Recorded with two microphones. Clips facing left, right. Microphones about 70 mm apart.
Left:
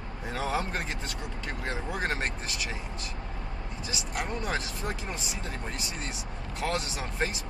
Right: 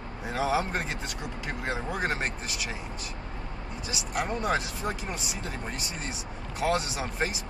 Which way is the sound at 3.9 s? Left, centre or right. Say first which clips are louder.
Right 3 dB; centre.